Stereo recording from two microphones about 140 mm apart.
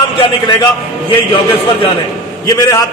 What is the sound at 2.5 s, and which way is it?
Speech, 25° left (ahead or behind).